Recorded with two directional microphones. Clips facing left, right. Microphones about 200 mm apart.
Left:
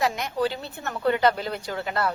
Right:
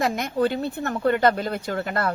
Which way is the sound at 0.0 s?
50° right (ahead or behind).